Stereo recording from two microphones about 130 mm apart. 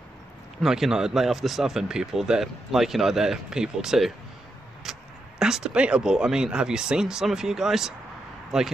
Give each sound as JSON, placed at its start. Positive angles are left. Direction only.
{"t": 0.6, "sound": "speech", "side_deg": -5}
{"t": 4.9, "sound": "a sound", "side_deg": -5}
{"t": 5.4, "sound": "speech", "side_deg": -5}